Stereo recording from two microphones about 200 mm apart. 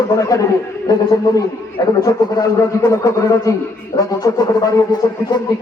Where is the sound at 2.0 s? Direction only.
20° left (ahead or behind).